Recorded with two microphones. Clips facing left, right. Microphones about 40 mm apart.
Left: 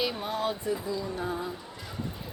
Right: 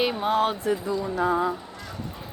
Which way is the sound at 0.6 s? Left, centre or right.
Right.